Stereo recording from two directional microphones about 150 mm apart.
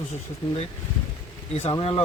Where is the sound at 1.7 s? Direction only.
35° left (ahead or behind).